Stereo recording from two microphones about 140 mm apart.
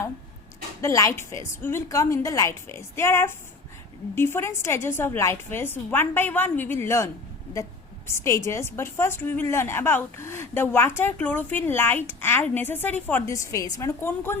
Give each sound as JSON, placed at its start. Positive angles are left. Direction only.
{"t": 0.8, "sound": "a woman's voice", "side_deg": 20}